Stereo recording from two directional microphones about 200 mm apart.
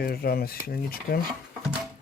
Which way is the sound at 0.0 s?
50° left (ahead or behind).